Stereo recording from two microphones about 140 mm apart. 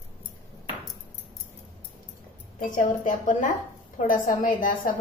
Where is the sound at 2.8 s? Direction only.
65° left (ahead or behind).